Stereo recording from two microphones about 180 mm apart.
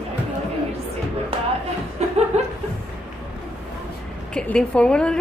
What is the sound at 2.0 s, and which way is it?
Chuckle, 40° right (ahead or behind).